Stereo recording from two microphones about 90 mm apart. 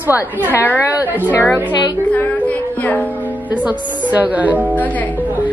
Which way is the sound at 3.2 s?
15° right (ahead or behind).